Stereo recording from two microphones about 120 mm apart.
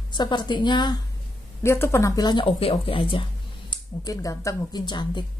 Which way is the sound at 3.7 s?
30° left (ahead or behind).